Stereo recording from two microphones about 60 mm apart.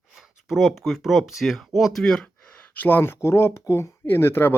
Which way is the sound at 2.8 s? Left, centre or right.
Left.